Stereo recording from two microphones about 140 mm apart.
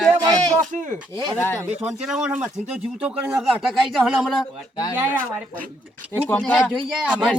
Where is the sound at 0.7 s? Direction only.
65° right (ahead or behind).